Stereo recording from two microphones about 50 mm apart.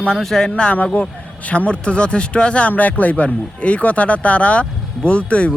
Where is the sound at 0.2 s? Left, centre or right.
Centre.